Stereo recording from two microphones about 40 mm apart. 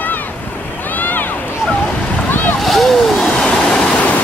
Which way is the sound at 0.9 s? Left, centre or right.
Left.